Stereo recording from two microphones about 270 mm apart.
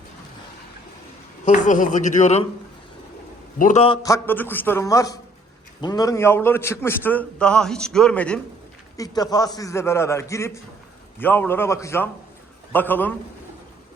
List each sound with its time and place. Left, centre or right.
1.5 s a man's voice: left
3.6 s a man's voice: left; by 13.1 s centre